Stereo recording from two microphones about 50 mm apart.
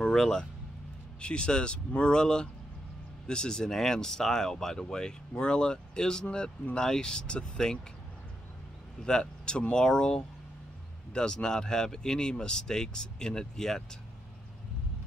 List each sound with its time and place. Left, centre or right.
0.0 s speech: centre
9.0 s speech: centre